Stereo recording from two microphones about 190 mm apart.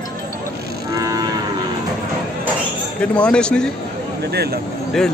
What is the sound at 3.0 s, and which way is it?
Speech, 5° left (ahead or behind).